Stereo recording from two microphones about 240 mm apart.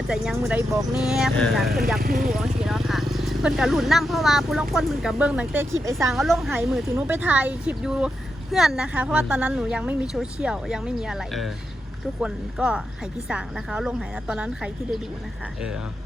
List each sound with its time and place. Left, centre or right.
0.1 s speech: centre
2.0 s speech: right
2.3 s speech: centre
6.1 s speech: centre